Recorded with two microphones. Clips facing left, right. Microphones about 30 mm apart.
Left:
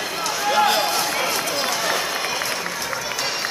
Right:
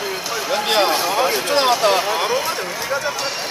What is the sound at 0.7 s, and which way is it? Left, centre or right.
Speech, right.